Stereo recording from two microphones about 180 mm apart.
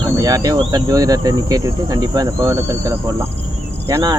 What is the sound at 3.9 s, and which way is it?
Speech, 20° right (ahead or behind).